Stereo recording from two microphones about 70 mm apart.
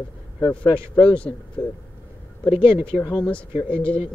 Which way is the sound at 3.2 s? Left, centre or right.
Centre.